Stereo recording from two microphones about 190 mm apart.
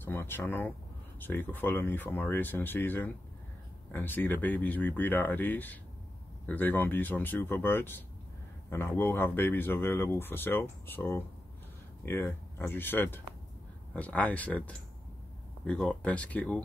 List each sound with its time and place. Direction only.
0.0 s speech: 10° left (ahead or behind)